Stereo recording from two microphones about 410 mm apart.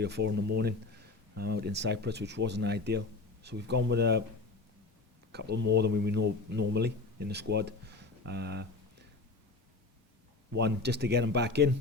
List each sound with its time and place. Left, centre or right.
0.0 s speech: right
5.3 s speech: right
7.5 s a sound: right
10.6 s speech: right